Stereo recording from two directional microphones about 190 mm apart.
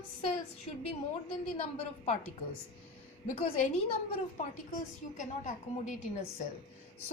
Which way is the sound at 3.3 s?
35° left (ahead or behind).